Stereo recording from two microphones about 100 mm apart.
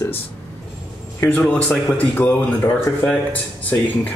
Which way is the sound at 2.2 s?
15° left (ahead or behind).